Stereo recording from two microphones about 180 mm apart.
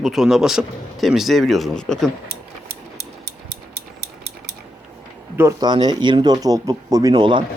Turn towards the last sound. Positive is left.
turn(degrees=-25)  # may be behind; listen again after turning